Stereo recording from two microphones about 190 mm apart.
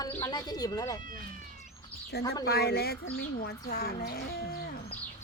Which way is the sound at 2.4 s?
60° left (ahead or behind).